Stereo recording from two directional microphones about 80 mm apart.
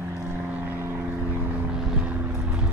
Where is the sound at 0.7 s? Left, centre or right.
Right.